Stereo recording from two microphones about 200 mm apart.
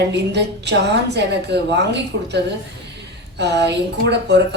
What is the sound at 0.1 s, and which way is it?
A woman's voice, 60° right (ahead or behind).